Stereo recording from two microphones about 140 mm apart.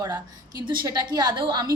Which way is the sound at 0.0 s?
25° right (ahead or behind).